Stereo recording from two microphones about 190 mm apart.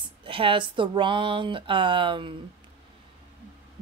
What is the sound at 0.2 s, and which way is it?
Speech, 25° right (ahead or behind).